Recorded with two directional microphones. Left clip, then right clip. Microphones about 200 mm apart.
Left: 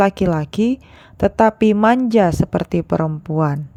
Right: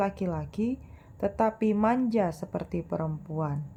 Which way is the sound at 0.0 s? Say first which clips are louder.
Left 14 dB; 40° left (ahead or behind).